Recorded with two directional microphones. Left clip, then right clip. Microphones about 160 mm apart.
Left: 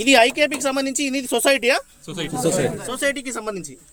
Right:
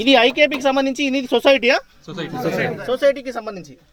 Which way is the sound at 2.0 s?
55° left (ahead or behind).